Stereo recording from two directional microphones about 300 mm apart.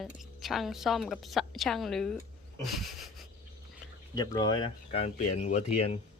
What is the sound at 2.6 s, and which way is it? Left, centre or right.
Wheeze, centre.